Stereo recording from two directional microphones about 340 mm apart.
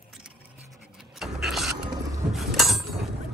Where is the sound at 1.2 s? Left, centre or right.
Centre.